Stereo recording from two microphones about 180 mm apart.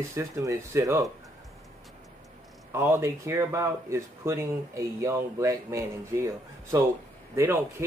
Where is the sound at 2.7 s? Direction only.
15° right (ahead or behind).